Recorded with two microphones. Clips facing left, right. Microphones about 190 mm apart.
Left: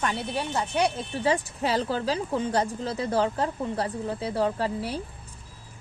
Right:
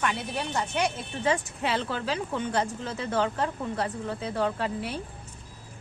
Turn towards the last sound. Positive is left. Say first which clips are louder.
# left 2 dB
turn(degrees=35)  # may be behind; listen again after turning